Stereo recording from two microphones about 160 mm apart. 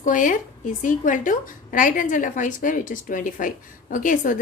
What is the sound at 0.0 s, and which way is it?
Speech, 55° left (ahead or behind).